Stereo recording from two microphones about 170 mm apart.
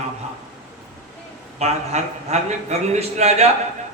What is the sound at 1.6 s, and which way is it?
Speech, 40° right (ahead or behind).